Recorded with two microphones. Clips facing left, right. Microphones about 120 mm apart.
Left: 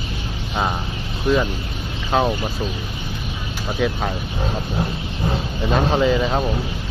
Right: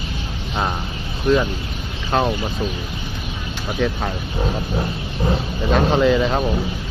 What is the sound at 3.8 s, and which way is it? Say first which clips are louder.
Speech: even; centre (ahead or behind).